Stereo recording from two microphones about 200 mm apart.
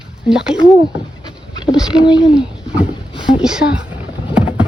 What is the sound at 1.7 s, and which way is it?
Speech, centre (ahead or behind).